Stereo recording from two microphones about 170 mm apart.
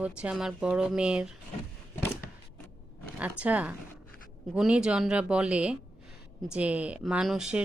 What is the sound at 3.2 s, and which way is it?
A woman's voice, 10° right (ahead or behind).